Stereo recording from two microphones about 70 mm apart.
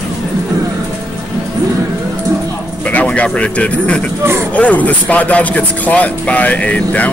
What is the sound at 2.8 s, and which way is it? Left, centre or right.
Speech, centre.